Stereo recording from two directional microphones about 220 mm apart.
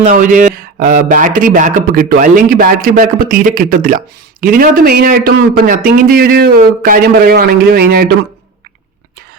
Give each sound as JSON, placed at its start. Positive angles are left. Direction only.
{"t": 0.0, "sound": "speech", "side_deg": -35}